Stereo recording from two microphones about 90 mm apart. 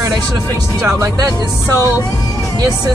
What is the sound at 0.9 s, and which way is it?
Speech, 40° right (ahead or behind).